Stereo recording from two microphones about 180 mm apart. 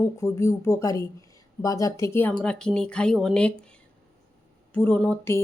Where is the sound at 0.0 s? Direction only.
15° left (ahead or behind).